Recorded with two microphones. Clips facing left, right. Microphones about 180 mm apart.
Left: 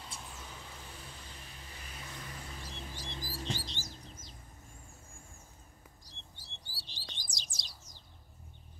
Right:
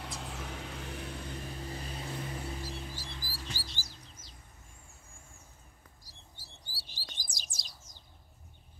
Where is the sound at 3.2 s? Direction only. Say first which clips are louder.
Left 5 dB; 25° left (ahead or behind).